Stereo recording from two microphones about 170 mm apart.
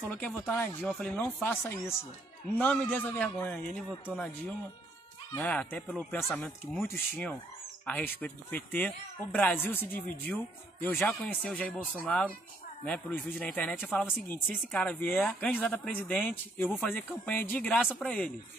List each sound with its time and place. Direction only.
0.0 s speech: 5° left (ahead or behind)
5.4 s speech: 10° left (ahead or behind)